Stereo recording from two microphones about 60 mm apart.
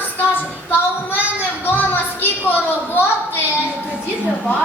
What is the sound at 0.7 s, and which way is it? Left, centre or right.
Child singing, left.